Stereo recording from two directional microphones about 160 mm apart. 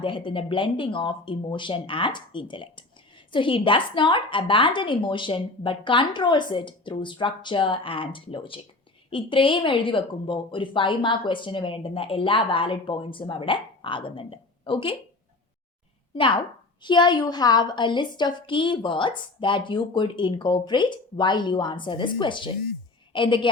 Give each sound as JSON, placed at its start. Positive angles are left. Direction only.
{"t": 0.0, "sound": "speech", "side_deg": 30}
{"t": 16.1, "sound": "a woman's voice", "side_deg": 30}